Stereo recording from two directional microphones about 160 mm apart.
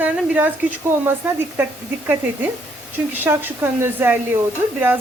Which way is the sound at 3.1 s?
10° right (ahead or behind).